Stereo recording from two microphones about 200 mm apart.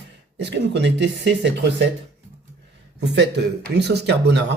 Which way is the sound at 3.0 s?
60° right (ahead or behind).